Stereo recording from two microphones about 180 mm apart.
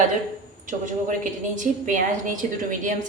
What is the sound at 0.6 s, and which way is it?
A woman's voice, 45° right (ahead or behind).